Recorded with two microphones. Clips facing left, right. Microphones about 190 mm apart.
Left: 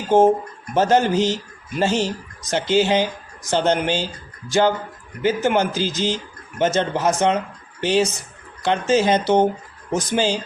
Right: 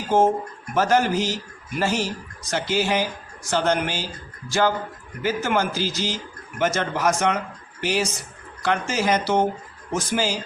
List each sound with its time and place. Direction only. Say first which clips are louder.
0.7 s speech: left 3 dB; 20° left (ahead or behind)